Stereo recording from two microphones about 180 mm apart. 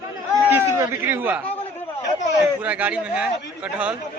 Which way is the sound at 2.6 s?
10° right (ahead or behind).